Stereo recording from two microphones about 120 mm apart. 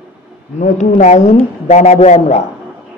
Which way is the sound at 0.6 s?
85° left.